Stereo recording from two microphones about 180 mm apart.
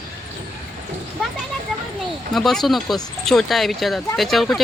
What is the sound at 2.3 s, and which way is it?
Speech, centre (ahead or behind).